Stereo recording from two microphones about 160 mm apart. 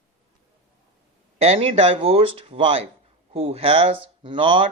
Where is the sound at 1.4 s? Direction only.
40° right (ahead or behind).